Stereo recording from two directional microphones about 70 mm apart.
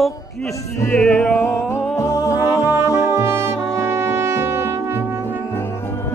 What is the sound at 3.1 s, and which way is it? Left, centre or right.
Brass instrument, right.